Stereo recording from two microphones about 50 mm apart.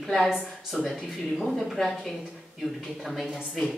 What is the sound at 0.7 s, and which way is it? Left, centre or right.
Speech, centre.